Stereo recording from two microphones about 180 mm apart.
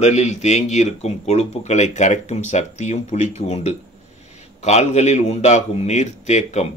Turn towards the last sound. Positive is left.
turn(degrees=40)  # may be behind; listen again after turning